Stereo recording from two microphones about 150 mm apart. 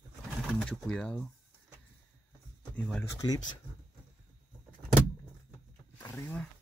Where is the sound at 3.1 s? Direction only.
25° left (ahead or behind).